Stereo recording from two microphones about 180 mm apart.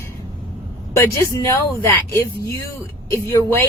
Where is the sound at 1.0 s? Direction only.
15° left (ahead or behind).